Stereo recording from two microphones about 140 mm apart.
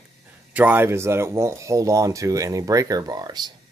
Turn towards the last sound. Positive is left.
turn(degrees=-30)  # may be behind; listen again after turning